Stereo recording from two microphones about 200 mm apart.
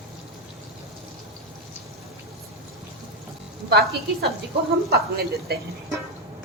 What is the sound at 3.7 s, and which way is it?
A woman's voice, 55° right (ahead or behind).